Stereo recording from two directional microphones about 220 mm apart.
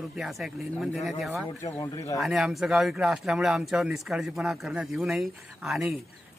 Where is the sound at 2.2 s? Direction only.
Centre (ahead or behind).